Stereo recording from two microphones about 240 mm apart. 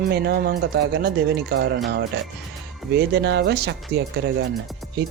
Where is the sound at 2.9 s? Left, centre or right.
Right.